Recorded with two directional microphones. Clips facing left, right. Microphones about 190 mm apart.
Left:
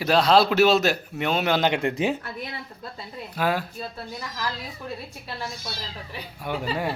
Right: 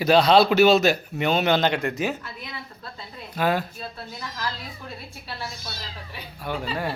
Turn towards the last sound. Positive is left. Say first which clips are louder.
# left 1 dB
turn(degrees=15)  # may be behind; listen again after turning